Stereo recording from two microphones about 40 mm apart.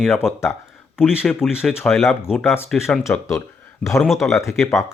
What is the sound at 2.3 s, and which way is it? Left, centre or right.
Speech, right.